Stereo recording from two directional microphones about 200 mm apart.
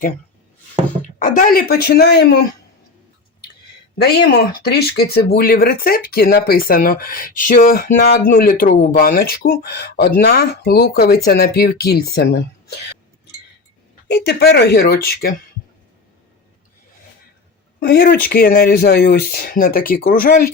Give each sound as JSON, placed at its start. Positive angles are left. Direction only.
{"t": 1.0, "sound": "speech", "side_deg": 40}
{"t": 3.9, "sound": "speech", "side_deg": 55}
{"t": 14.1, "sound": "speech", "side_deg": 55}
{"t": 17.7, "sound": "speech", "side_deg": 55}